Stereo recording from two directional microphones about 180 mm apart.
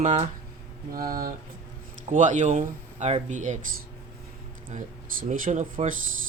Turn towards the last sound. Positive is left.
turn(degrees=-40)  # may be behind; listen again after turning